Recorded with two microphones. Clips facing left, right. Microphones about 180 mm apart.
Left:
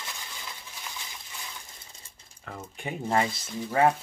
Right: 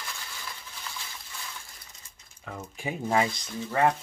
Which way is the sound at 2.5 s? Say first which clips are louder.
Right 1 dB; centre (ahead or behind).